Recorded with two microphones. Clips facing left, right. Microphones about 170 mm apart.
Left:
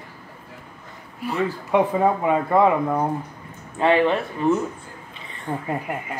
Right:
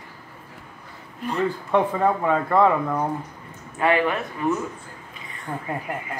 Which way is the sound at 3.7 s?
25° left (ahead or behind).